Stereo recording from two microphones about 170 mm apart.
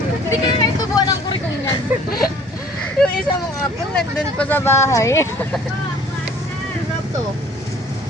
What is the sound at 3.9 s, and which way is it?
Speech, 10° left (ahead or behind).